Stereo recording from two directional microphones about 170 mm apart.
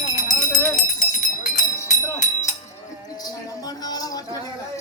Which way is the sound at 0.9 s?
45° left (ahead or behind).